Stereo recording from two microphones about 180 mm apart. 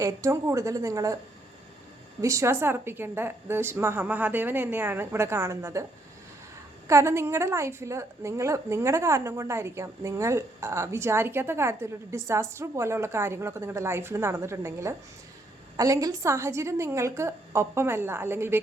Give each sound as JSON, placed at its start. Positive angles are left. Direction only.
{"t": 0.0, "sound": "a woman's voice", "side_deg": -15}
{"t": 2.2, "sound": "a woman's voice", "side_deg": -15}
{"t": 6.8, "sound": "a woman's voice", "side_deg": -15}